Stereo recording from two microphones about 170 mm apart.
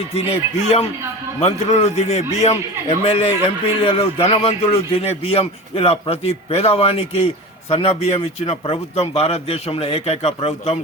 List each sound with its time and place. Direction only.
0.1 s a man's voice: 35° left (ahead or behind)